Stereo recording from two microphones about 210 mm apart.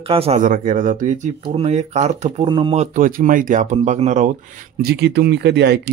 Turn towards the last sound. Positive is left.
turn(degrees=-55)  # may be behind; listen again after turning